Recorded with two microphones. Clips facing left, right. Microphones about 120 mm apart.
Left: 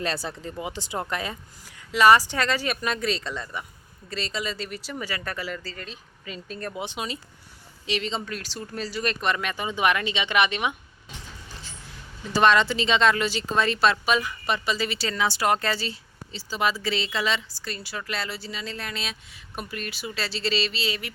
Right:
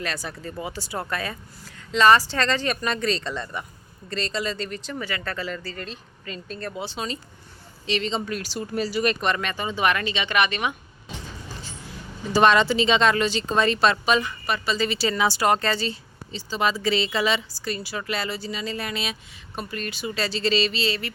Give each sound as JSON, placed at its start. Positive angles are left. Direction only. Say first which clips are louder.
{"t": 0.0, "sound": "a woman's voice", "louder": "left 2 dB", "side_deg": 30}
{"t": 8.2, "sound": "speech", "louder": "right 5 dB", "side_deg": -5}
{"t": 9.2, "sound": "a woman's voice", "louder": "right 1 dB", "side_deg": 5}
{"t": 12.3, "sound": "speech", "louder": "right 2 dB", "side_deg": 0}
{"t": 14.4, "sound": "speech", "louder": "even", "side_deg": 20}
{"t": 14.8, "sound": "speech", "louder": "right 4 dB", "side_deg": 0}
{"t": 19.5, "sound": "speech", "louder": "right 3 dB", "side_deg": 5}